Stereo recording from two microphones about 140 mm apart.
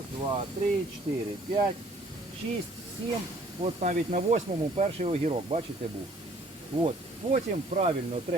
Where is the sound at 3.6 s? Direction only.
55° right (ahead or behind).